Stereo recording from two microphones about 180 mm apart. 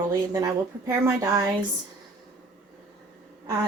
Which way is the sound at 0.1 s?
15° right (ahead or behind).